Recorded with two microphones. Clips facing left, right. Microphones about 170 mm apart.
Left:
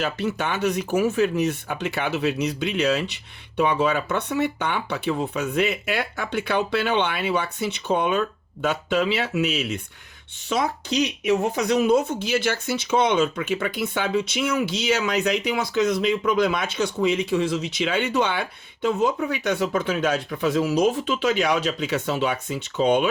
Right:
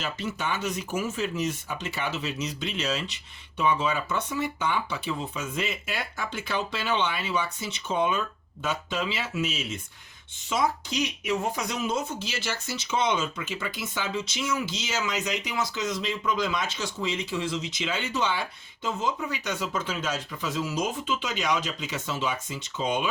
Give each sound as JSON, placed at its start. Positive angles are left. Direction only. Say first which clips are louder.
{"t": 0.0, "sound": "speech", "louder": "left 6 dB", "side_deg": 65}